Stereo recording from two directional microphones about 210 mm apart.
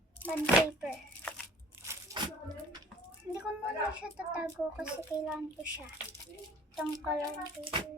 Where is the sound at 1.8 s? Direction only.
15° right (ahead or behind).